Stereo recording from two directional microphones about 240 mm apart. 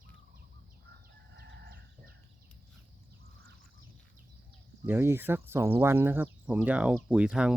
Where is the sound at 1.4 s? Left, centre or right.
Right.